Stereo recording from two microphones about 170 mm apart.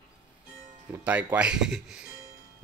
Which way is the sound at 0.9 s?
10° right (ahead or behind).